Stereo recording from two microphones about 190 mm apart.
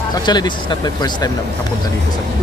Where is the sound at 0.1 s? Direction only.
20° left (ahead or behind).